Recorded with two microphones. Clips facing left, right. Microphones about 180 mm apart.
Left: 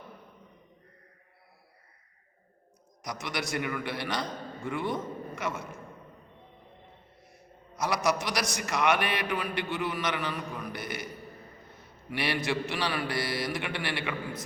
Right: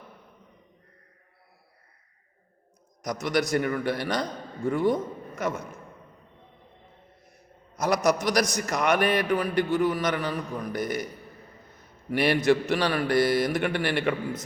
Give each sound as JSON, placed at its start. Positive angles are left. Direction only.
{"t": 3.0, "sound": "a man's voice", "side_deg": -45}
{"t": 7.8, "sound": "a man's voice", "side_deg": -45}
{"t": 11.8, "sound": "a sound", "side_deg": -50}
{"t": 12.5, "sound": "speech", "side_deg": -45}